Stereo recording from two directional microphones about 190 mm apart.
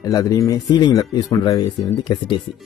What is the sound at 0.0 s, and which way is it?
Speech, 20° left (ahead or behind).